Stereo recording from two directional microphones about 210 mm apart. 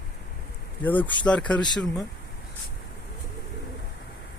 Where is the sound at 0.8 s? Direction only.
10° left (ahead or behind).